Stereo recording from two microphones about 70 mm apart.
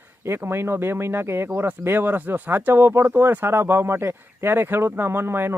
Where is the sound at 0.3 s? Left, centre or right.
Right.